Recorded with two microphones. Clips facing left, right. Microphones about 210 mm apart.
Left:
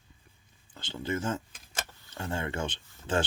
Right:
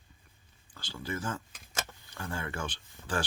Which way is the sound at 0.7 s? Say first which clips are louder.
Left 5 dB; 25° left (ahead or behind).